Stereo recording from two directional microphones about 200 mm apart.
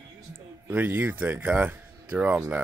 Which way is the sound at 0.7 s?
10° right (ahead or behind).